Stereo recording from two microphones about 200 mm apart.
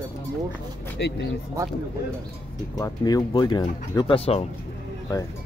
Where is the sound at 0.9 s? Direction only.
55° left (ahead or behind).